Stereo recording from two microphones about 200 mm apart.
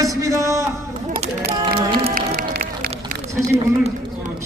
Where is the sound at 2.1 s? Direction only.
45° right (ahead or behind).